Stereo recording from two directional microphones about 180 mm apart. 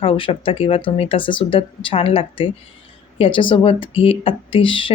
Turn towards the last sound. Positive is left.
turn(degrees=30)  # may be behind; listen again after turning